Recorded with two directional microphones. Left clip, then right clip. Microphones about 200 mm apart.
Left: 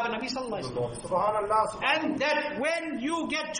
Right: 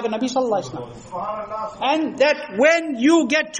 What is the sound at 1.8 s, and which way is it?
A man's voice, 40° right (ahead or behind).